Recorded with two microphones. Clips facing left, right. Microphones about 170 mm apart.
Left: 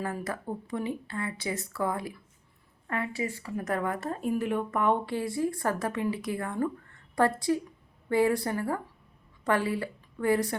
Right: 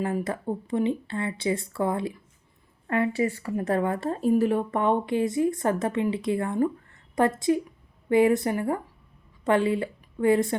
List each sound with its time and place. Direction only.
0.0 s a woman's voice: 25° right (ahead or behind)
3.1 s a woman's voice: 60° right (ahead or behind)
3.6 s a woman's voice: 30° right (ahead or behind)